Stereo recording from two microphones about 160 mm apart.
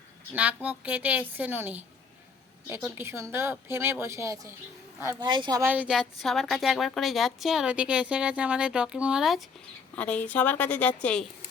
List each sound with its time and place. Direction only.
0.3 s speech: 10° right (ahead or behind); by 5.6 s 25° right (ahead or behind)
5.6 s a woman's voice: 10° right (ahead or behind)
9.9 s a woman's voice: 10° left (ahead or behind)